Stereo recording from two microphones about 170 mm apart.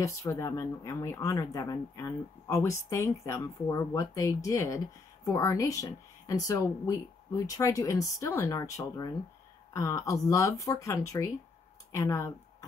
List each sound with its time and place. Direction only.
0.0 s speech: 20° left (ahead or behind)